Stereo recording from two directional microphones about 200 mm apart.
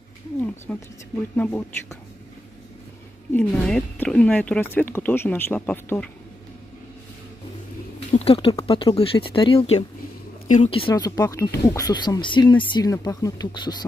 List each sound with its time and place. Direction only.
0.7 s speech: 5° left (ahead or behind)
3.3 s speech: 5° left (ahead or behind)
8.1 s speech: 30° left (ahead or behind)